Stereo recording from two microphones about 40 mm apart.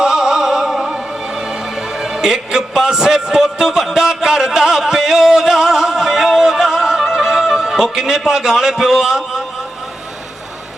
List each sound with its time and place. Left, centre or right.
0.0 s music: centre
2.7 s a sound: centre
7.9 s a man's voice: centre